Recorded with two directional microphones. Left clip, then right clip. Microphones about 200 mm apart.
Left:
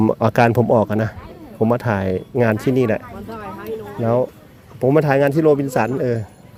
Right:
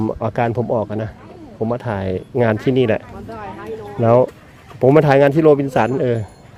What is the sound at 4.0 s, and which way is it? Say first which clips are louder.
Speech: right 6 dB; 10° right (ahead or behind).